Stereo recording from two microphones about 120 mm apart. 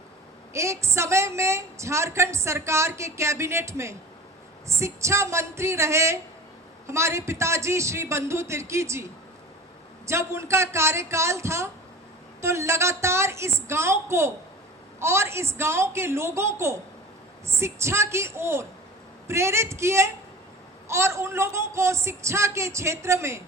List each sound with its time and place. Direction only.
0.5 s a woman's voice: 25° right (ahead or behind)
10.1 s a woman's voice: 20° right (ahead or behind)